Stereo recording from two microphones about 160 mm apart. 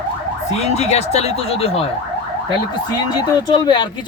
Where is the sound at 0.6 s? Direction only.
45° left (ahead or behind).